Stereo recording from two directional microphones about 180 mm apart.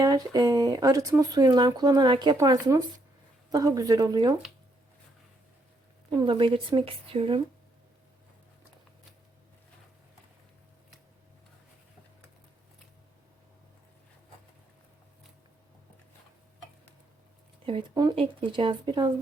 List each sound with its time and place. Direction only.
0.0 s speech: 20° right (ahead or behind)
6.1 s speech: 25° right (ahead or behind)
17.7 s speech: 25° right (ahead or behind)